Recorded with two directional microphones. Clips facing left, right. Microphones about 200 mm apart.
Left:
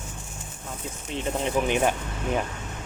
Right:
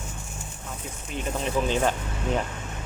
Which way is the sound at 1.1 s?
20° left (ahead or behind).